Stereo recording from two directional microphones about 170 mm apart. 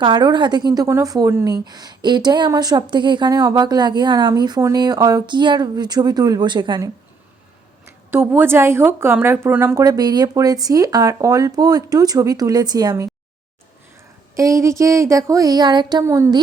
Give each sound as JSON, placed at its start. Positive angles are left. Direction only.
{"t": 0.0, "sound": "a woman's voice", "side_deg": -25}
{"t": 8.1, "sound": "a woman's voice", "side_deg": -10}
{"t": 14.3, "sound": "a woman's voice", "side_deg": -20}